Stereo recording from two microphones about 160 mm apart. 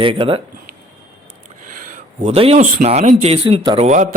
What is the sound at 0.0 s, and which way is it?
Speech, 35° right (ahead or behind).